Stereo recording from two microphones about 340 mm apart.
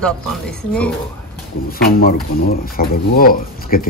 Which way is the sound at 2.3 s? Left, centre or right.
Left.